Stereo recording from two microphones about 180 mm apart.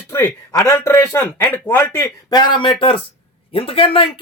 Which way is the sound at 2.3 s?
25° left (ahead or behind).